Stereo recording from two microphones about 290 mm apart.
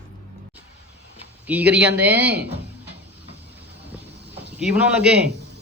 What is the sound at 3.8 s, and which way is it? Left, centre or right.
Vehicle, centre.